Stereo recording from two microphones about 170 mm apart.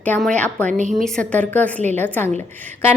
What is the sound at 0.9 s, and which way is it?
A woman's voice, 5° left (ahead or behind).